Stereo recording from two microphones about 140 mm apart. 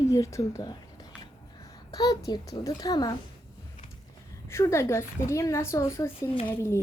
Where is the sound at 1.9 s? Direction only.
25° left (ahead or behind).